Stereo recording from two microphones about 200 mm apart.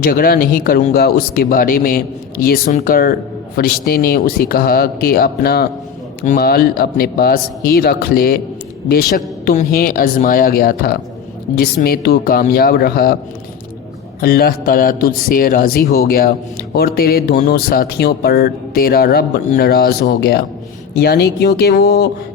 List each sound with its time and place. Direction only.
0.0 s a man's voice: 50° left (ahead or behind)
14.2 s a man's voice: 50° left (ahead or behind)